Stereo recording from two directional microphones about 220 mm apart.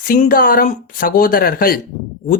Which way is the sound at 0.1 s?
40° left (ahead or behind).